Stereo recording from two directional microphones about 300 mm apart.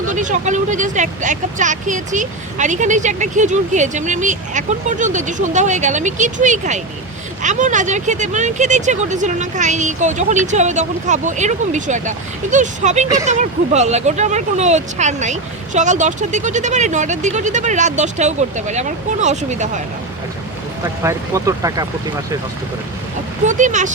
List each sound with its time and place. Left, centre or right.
0.1 s speech: right
20.8 s speech: centre
23.5 s speech: right